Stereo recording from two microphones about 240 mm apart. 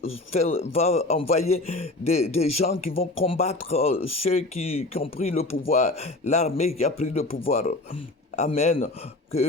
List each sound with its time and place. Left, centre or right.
0.0 s speech: left